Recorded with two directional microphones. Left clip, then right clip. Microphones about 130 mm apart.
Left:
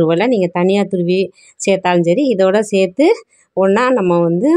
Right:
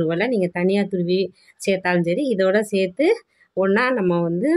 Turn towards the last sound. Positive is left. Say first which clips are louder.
# left 7 dB
turn(degrees=45)  # may be behind; listen again after turning